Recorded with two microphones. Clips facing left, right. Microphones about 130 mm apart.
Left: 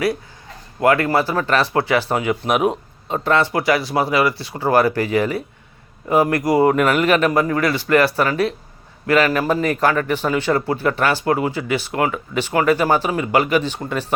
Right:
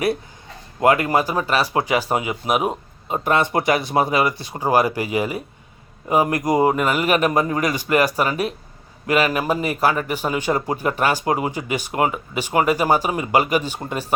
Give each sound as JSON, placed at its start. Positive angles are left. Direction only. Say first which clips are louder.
{"t": 0.8, "sound": "a man's voice", "louder": "left 1 dB", "side_deg": -15}
{"t": 3.2, "sound": "a man's voice", "louder": "left 1 dB", "side_deg": -20}
{"t": 6.7, "sound": "a man's voice", "louder": "left 3 dB", "side_deg": -5}
{"t": 7.3, "sound": "a man's voice", "louder": "left 2 dB", "side_deg": -25}